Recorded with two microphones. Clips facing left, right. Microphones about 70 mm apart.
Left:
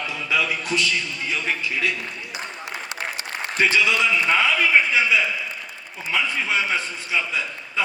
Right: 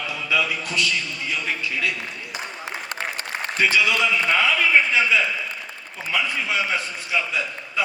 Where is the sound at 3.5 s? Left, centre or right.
Left.